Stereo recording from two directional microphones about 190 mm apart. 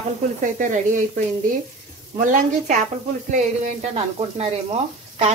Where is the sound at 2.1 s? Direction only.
40° right (ahead or behind).